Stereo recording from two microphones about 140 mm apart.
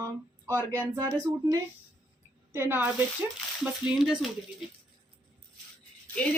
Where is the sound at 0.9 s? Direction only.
20° right (ahead or behind).